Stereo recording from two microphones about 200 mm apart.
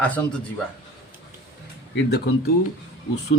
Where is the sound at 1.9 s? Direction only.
55° left (ahead or behind).